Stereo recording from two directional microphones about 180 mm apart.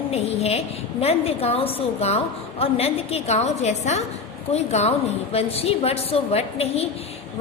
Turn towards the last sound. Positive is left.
turn(degrees=35)  # may be behind; listen again after turning